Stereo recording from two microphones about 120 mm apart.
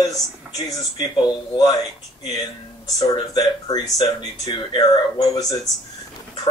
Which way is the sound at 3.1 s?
30° left (ahead or behind).